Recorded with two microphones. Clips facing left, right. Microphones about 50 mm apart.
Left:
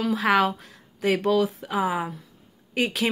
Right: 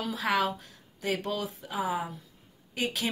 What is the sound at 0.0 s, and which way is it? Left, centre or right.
Speech, left.